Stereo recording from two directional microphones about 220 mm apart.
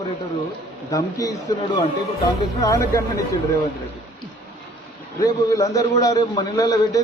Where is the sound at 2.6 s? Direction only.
15° left (ahead or behind).